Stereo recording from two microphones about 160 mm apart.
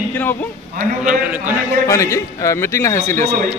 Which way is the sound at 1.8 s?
20° left (ahead or behind).